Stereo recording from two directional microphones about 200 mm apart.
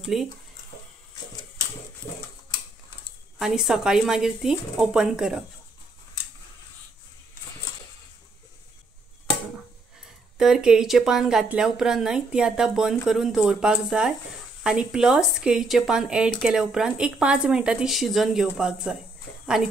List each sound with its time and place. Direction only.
0.0 s speech: centre (ahead or behind)
3.3 s speech: centre (ahead or behind)
10.3 s speech: 5° right (ahead or behind)